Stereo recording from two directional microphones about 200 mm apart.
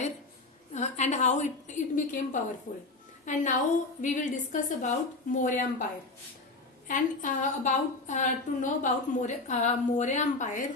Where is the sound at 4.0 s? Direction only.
40° left (ahead or behind).